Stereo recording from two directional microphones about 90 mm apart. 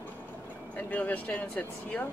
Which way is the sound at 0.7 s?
15° left (ahead or behind).